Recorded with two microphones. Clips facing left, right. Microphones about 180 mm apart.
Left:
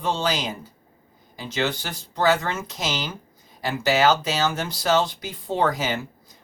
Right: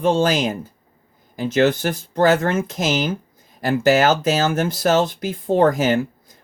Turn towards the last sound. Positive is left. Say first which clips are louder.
# right 7 dB
turn(degrees=-50)  # may be behind; listen again after turning